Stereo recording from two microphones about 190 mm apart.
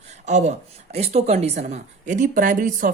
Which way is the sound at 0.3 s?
40° right (ahead or behind).